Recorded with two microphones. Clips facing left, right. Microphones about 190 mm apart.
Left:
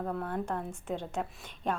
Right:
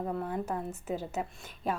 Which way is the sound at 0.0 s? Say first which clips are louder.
Right 1 dB; 5° right (ahead or behind).